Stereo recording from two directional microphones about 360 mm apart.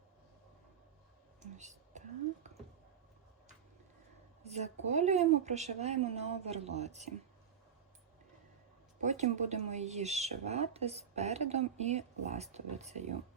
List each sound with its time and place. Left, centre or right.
1.4 s whispering: centre
4.4 s speech: centre
9.0 s speech: centre